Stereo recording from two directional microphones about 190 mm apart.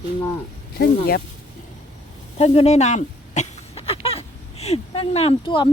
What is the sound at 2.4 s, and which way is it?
Speech, 30° left (ahead or behind).